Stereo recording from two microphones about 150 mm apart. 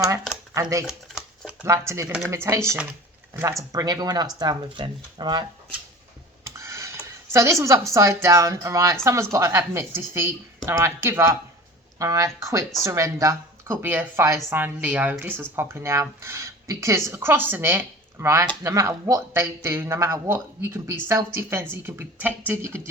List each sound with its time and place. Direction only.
0.5 s speech: 20° right (ahead or behind)
0.9 s shuffling cards: 5° right (ahead or behind)
1.6 s speech: 20° right (ahead or behind)
6.4 s tick: 20° right (ahead or behind)
7.3 s speech: 20° right (ahead or behind)